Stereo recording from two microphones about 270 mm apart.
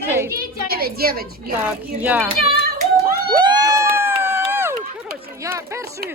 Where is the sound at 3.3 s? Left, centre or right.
Centre.